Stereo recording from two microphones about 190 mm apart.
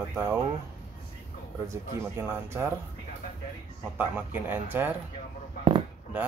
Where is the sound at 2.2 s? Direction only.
10° right (ahead or behind).